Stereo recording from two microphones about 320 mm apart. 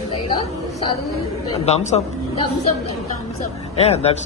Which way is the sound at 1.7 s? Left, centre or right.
Centre.